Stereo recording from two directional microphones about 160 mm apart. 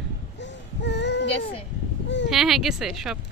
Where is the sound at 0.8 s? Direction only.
90° left.